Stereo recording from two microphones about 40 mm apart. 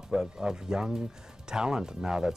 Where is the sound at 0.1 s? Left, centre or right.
Centre.